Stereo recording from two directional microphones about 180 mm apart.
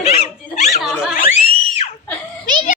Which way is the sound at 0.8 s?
Centre (ahead or behind).